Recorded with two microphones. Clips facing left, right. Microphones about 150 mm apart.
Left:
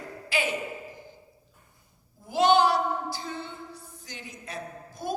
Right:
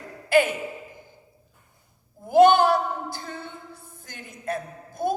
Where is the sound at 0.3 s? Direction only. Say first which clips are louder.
Right 10 dB; 50° right (ahead or behind).